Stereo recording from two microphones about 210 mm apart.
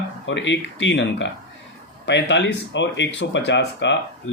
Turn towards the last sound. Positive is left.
turn(degrees=55)  # may be behind; listen again after turning